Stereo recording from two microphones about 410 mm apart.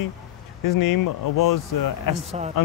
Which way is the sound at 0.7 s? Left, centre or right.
Left.